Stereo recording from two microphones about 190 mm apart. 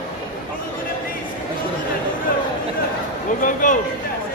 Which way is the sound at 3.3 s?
45° left (ahead or behind).